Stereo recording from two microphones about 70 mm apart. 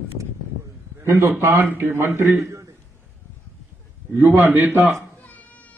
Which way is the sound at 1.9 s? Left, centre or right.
Right.